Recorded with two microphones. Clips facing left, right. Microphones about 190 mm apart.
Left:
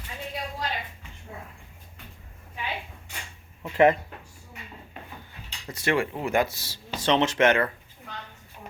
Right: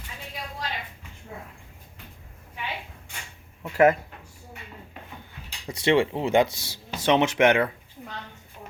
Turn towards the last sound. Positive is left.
turn(degrees=-15)  # may be behind; listen again after turning